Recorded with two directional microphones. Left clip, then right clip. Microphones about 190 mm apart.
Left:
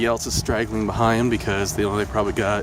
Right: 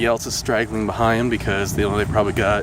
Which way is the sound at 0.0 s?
Centre (ahead or behind).